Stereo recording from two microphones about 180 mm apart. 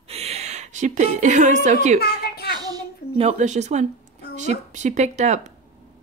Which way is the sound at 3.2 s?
40° right (ahead or behind).